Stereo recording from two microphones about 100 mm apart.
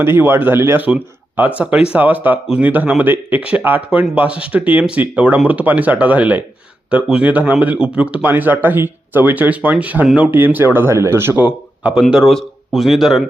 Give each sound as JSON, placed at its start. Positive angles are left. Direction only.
{"t": 0.0, "sound": "speech", "side_deg": -20}
{"t": 11.4, "sound": "speech", "side_deg": -10}
{"t": 12.1, "sound": "speech", "side_deg": 0}